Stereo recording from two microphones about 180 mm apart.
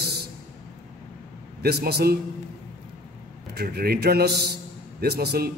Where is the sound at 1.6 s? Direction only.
60° right (ahead or behind).